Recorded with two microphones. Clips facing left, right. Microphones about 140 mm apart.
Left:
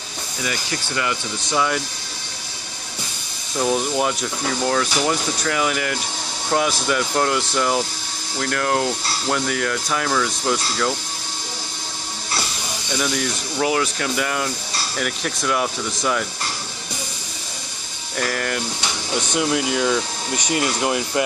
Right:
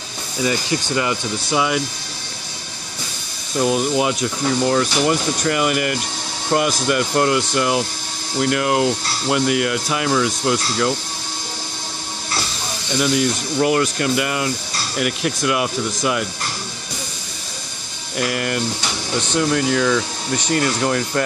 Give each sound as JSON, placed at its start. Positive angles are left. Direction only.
{"t": 0.4, "sound": "speech", "side_deg": -30}
{"t": 1.5, "sound": "speech", "side_deg": -10}
{"t": 3.5, "sound": "speech", "side_deg": -5}
{"t": 13.6, "sound": "speech", "side_deg": -5}
{"t": 18.1, "sound": "speech", "side_deg": -5}
{"t": 19.3, "sound": "speech", "side_deg": 5}